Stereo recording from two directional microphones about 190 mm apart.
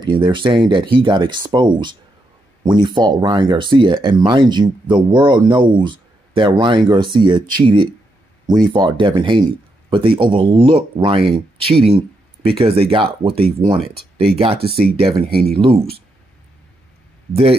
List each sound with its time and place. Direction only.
0.0 s speech: 25° right (ahead or behind)
14.6 s speech: 55° right (ahead or behind)
15.0 s speech: 30° right (ahead or behind)
15.3 s speech: 55° right (ahead or behind)
15.6 s speech: 30° right (ahead or behind)
17.3 s speech: 30° right (ahead or behind)